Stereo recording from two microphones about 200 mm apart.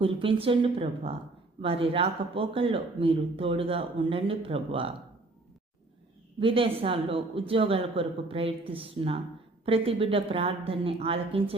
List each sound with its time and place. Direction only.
0.0 s speech: 25° right (ahead or behind)
6.4 s speech: 25° right (ahead or behind)